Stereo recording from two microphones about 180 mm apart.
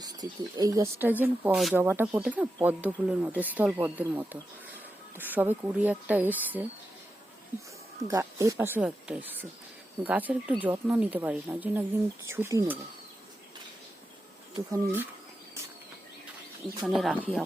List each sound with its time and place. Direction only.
0.0 s speech: 20° right (ahead or behind)
8.0 s speech: 15° right (ahead or behind)
14.5 s speech: 20° right (ahead or behind)
16.8 s speech: centre (ahead or behind)